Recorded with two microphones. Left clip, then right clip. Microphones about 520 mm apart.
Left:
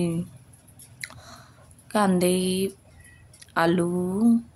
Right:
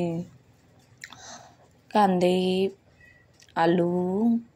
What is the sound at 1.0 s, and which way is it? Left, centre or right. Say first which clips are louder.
Chewing: left 2 dB; left.